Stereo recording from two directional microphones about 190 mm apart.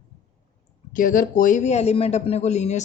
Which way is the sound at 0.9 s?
45° left (ahead or behind).